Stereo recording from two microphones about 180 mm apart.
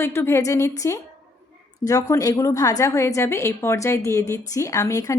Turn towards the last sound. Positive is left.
turn(degrees=20)  # may be behind; listen again after turning